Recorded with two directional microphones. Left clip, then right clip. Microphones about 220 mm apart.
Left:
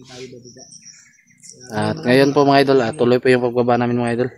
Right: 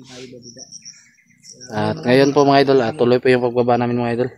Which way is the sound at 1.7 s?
Centre (ahead or behind).